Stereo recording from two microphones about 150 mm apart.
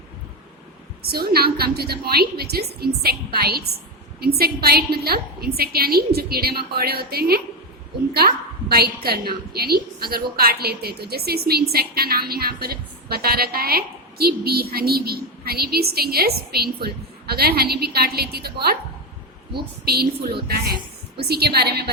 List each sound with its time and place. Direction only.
1.0 s a woman's voice: 90° right
8.7 s a woman's voice: 90° right
19.8 s a woman's voice: 90° right